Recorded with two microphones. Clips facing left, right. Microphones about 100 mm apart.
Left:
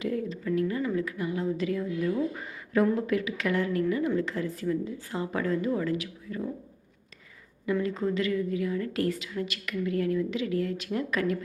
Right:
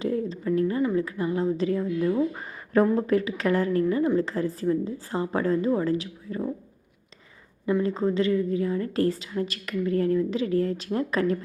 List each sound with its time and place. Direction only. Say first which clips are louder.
0.0 s speech: right 4 dB; 30° right (ahead or behind)
7.7 s a woman's voice: right 4 dB; 30° right (ahead or behind)